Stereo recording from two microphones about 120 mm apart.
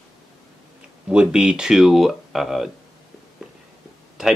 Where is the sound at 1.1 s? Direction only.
5° right (ahead or behind).